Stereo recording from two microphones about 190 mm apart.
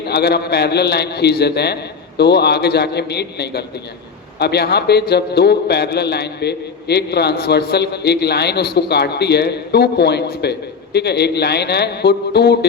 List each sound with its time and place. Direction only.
0.1 s a man's voice: 60° left (ahead or behind)